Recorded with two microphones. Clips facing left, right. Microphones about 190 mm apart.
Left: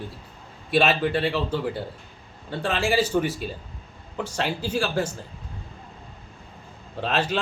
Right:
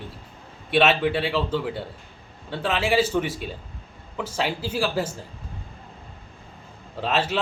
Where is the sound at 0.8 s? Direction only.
75° right (ahead or behind).